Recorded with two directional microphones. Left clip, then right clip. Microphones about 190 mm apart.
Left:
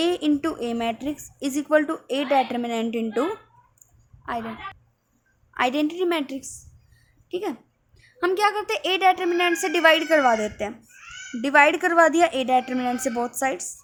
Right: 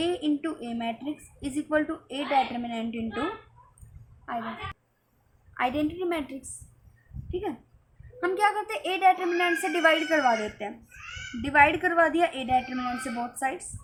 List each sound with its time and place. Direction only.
0.0 s a woman's voice: 65° left (ahead or behind)
4.2 s a woman's voice: 55° left (ahead or behind)
5.5 s a woman's voice: 55° left (ahead or behind)
7.3 s a woman's voice: 65° left (ahead or behind)